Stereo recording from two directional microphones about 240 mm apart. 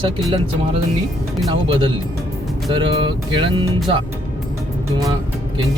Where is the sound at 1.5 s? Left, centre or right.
Right.